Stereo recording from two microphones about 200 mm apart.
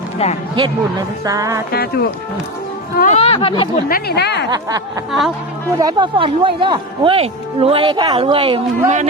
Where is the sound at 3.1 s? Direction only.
30° left (ahead or behind).